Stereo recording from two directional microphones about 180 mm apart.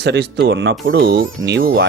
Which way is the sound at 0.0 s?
70° right (ahead or behind).